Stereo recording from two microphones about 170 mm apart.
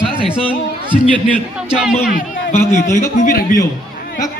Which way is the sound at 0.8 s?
30° right (ahead or behind).